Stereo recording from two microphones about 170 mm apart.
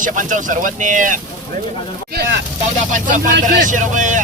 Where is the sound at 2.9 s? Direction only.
50° right (ahead or behind).